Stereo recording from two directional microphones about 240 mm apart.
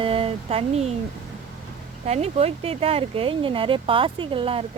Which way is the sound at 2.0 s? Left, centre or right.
Right.